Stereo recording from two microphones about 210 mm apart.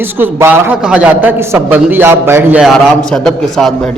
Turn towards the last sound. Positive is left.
turn(degrees=0)  # may be behind; listen again after turning